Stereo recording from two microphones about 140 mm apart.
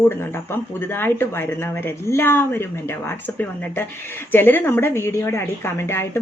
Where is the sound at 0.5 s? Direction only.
15° left (ahead or behind).